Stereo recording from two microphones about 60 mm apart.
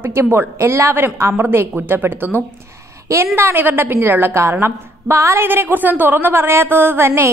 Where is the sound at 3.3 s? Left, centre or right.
Right.